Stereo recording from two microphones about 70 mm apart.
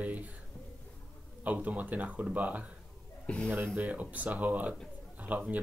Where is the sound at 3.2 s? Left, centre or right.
Centre.